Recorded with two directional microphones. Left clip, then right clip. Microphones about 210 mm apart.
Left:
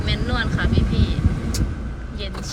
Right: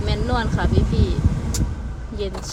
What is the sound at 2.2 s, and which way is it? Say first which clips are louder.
Speech: right 4 dB; 25° right (ahead or behind).